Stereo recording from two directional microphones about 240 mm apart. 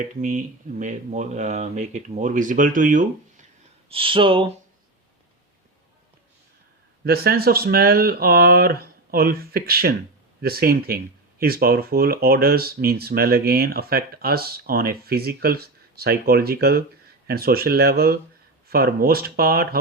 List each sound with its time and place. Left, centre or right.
0.0 s speech: right
3.8 s speech: right
7.0 s speech: right